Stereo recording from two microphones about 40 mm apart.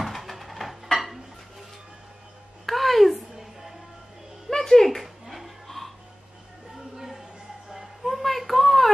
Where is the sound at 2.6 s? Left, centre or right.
Centre.